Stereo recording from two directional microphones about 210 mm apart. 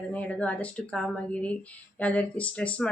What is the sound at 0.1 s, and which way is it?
A woman's voice, 5° left (ahead or behind).